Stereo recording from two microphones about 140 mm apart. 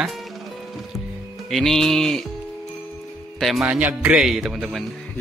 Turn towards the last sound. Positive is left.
turn(degrees=0)  # may be behind; listen again after turning